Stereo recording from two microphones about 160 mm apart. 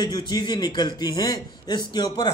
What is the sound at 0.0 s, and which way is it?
A man's voice, 25° left (ahead or behind).